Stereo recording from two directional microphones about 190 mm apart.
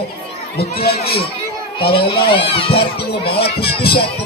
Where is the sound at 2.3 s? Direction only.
30° left (ahead or behind).